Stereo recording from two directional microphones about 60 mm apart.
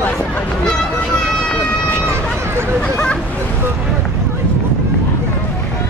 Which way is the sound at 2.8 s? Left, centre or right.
Centre.